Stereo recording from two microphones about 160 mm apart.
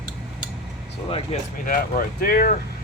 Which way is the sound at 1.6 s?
60° left (ahead or behind).